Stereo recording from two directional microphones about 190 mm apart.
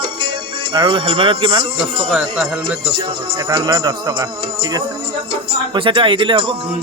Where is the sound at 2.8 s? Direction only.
25° right (ahead or behind).